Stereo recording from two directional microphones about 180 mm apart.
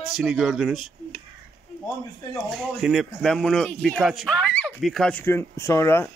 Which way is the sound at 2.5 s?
Centre (ahead or behind).